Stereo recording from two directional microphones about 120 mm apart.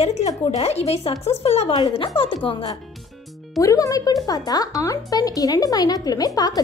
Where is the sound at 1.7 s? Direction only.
45° left (ahead or behind).